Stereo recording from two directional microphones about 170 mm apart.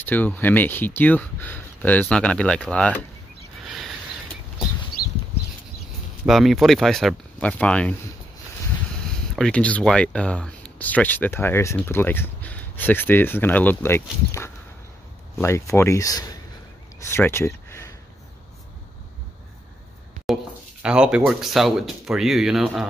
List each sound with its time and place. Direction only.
0.0 s speech: 10° left (ahead or behind)
3.6 s a sound: centre (ahead or behind)
6.2 s speech: centre (ahead or behind)
9.3 s speech: 5° left (ahead or behind)
15.4 s speech: 15° left (ahead or behind)
17.0 s a sound: 15° left (ahead or behind)
20.8 s speech: 5° right (ahead or behind)